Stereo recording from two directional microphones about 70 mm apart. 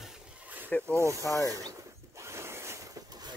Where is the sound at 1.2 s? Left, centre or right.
Left.